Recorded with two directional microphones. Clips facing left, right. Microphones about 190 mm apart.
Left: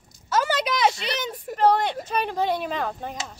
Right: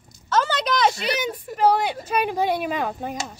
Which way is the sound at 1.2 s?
5° right (ahead or behind).